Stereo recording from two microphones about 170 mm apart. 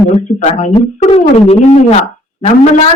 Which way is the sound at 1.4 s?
35° left (ahead or behind).